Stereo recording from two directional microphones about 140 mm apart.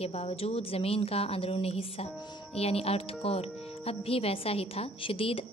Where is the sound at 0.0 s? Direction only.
45° left (ahead or behind).